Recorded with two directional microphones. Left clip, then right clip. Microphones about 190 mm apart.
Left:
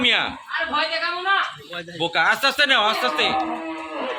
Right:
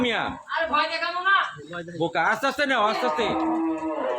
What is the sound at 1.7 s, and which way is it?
Speech, 45° right (ahead or behind).